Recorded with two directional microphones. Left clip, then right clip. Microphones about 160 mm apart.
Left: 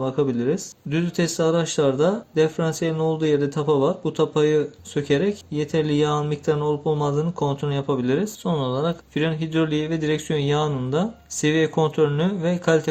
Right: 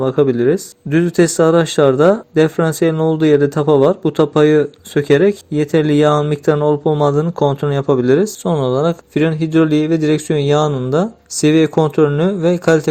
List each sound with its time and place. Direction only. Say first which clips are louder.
0.0 s speech: right 9 dB; 35° right (ahead or behind)